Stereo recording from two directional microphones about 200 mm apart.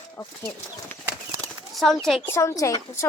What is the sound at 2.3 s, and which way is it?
Speech, 15° left (ahead or behind).